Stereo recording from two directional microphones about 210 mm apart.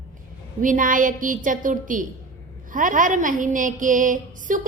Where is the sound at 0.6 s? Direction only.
40° right (ahead or behind).